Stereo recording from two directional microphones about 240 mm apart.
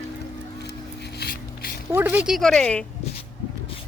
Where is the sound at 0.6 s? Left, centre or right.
Left.